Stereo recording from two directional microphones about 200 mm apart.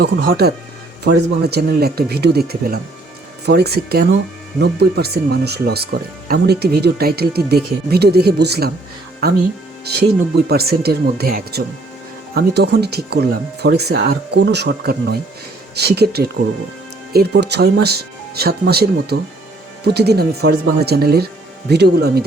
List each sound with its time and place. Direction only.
0.0 s speech: 55° right (ahead or behind)